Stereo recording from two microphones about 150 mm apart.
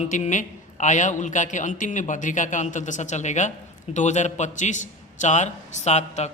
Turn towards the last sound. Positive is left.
turn(degrees=50)  # may be behind; listen again after turning